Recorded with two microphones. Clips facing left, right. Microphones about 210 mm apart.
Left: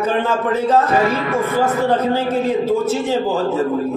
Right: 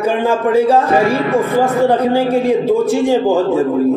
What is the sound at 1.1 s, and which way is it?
Speech, 30° right (ahead or behind).